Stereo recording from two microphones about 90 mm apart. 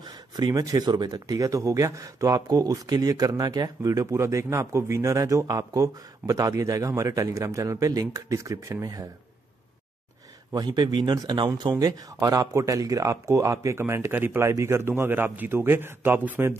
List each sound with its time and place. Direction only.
0.4 s speech: 45° right (ahead or behind)
10.5 s speech: 50° right (ahead or behind)
11.8 s speech: 40° right (ahead or behind); by 16.5 s 25° right (ahead or behind)